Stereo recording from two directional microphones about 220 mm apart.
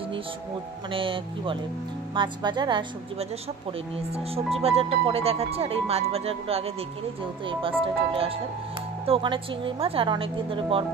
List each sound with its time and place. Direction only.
0.9 s speech: 25° right (ahead or behind)
7.8 s speech: 25° right (ahead or behind)